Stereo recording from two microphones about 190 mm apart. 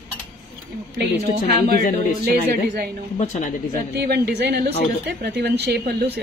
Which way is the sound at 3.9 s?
60° right (ahead or behind).